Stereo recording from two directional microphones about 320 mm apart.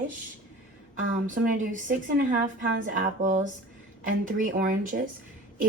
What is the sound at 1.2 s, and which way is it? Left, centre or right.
Speech, right.